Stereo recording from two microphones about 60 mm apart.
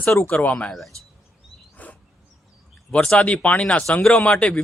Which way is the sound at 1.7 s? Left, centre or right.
Left.